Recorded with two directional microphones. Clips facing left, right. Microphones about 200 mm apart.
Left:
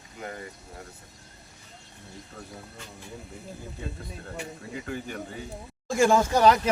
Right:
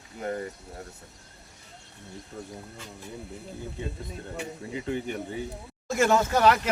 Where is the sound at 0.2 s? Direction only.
35° right (ahead or behind).